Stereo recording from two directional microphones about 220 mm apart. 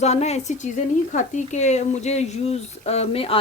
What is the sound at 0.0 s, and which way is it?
Speech, 30° left (ahead or behind).